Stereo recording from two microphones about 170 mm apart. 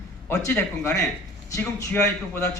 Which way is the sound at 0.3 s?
15° left (ahead or behind).